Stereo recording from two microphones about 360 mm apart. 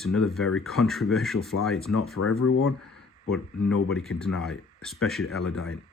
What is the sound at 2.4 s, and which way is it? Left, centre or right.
Speech, left.